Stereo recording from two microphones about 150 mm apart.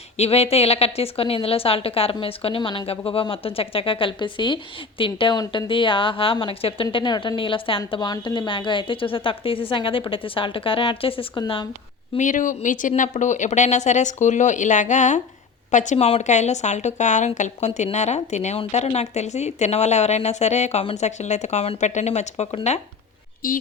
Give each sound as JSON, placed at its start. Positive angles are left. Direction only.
{"t": 0.2, "sound": "a woman's voice", "side_deg": 45}
{"t": 12.1, "sound": "speech", "side_deg": 55}
{"t": 23.4, "sound": "speech", "side_deg": 70}